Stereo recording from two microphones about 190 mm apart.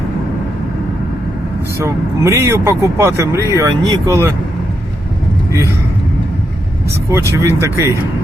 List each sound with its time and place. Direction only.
1.8 s speech: 15° right (ahead or behind)
6.9 s speech: 15° right (ahead or behind)